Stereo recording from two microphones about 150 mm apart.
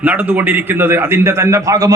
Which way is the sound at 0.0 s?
10° right (ahead or behind).